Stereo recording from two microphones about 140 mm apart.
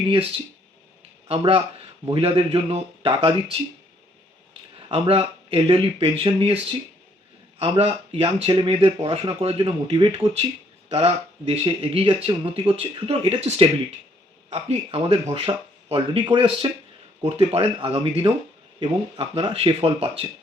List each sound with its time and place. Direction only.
2.0 s speech: 40° right (ahead or behind)
4.9 s speech: 45° right (ahead or behind)
7.6 s speech: 45° right (ahead or behind)